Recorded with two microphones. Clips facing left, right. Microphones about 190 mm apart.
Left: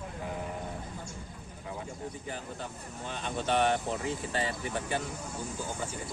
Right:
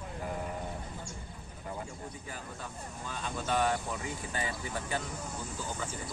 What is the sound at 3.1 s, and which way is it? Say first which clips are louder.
Speech: left 3 dB; 25° left (ahead or behind).